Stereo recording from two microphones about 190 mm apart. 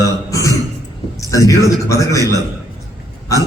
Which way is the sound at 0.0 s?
15° left (ahead or behind).